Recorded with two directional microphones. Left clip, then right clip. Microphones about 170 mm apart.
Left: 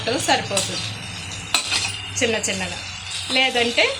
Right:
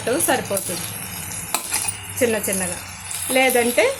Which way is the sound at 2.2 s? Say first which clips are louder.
Right 1 dB; 45° right (ahead or behind).